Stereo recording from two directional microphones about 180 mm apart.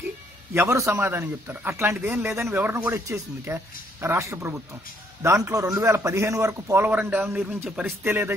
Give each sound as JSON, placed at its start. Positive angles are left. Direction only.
{"t": 0.6, "sound": "a man's voice", "side_deg": -15}